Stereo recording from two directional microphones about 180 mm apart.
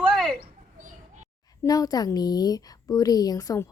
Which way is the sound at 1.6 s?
20° left (ahead or behind).